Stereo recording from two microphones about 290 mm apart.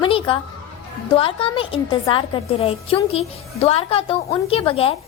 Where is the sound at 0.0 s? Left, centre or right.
Centre.